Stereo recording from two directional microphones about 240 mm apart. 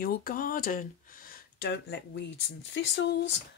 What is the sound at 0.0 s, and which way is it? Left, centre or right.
Speech, left.